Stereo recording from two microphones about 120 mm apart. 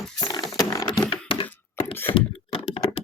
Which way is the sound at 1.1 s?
50° left (ahead or behind).